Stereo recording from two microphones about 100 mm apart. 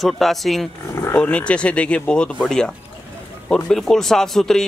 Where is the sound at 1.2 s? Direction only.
10° left (ahead or behind).